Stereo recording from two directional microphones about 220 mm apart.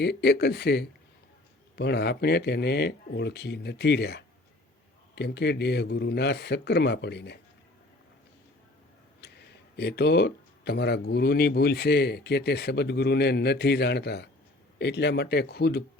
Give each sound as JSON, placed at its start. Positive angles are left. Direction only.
{"t": 0.0, "sound": "speech", "side_deg": 50}
{"t": 9.2, "sound": "speech", "side_deg": 50}